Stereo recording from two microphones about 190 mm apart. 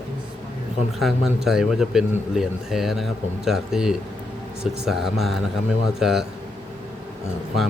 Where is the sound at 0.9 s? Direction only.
Centre (ahead or behind).